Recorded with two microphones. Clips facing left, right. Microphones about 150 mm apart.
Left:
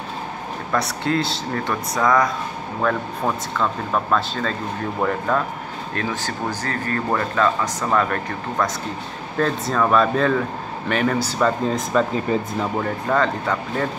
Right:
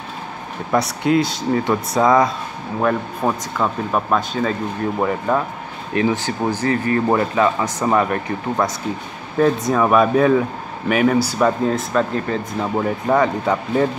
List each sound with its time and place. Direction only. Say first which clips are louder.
0.7 s speech: right 5 dB; 15° right (ahead or behind)
2.8 s speech: right 3 dB; 10° right (ahead or behind)
12.8 s speech: right 5 dB; 15° right (ahead or behind)